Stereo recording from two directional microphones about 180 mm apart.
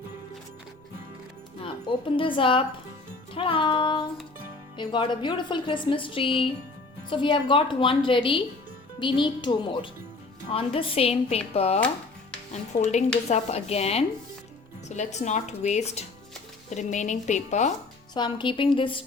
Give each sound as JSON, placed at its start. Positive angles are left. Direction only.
{"t": 1.6, "sound": "a woman's voice", "side_deg": 30}
{"t": 3.3, "sound": "music", "side_deg": 30}
{"t": 4.8, "sound": "a woman's voice", "side_deg": 25}
{"t": 18.1, "sound": "a woman's voice", "side_deg": 25}